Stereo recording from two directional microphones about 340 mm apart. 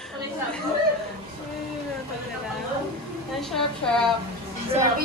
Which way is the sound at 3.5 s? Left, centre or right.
Centre.